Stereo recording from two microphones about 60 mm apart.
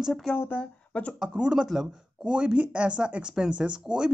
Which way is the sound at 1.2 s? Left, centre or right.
Centre.